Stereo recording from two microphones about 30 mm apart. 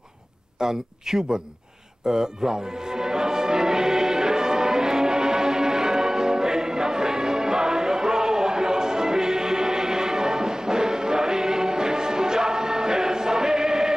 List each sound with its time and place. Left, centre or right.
0.6 s speech: centre
2.0 s music: right